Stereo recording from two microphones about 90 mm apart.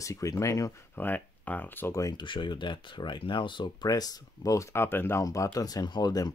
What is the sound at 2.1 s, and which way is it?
Speech, 65° left (ahead or behind).